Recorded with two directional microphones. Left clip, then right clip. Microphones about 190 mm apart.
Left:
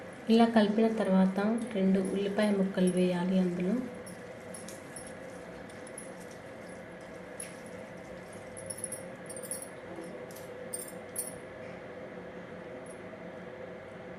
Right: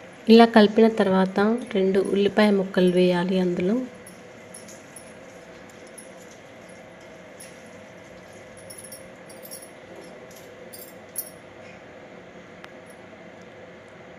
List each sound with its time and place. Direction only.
0.3 s speech: 60° right (ahead or behind)